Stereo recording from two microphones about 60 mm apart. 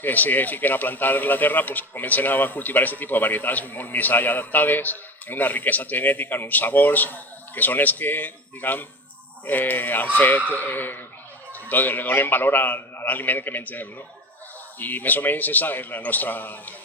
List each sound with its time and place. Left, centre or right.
0.0 s a man's voice: left